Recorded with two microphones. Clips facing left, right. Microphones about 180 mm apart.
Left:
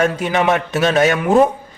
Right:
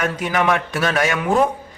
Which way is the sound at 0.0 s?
25° left (ahead or behind).